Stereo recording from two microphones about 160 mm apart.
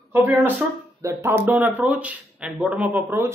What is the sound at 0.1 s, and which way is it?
Speech, 15° right (ahead or behind).